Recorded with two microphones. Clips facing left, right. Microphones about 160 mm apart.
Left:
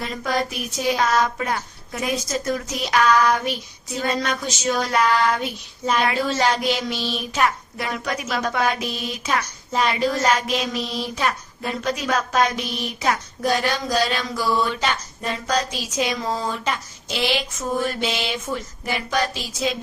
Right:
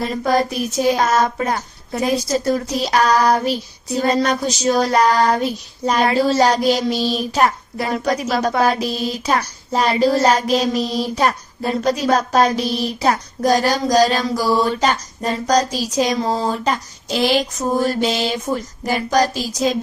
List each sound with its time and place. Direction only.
0.0 s speech: 35° right (ahead or behind)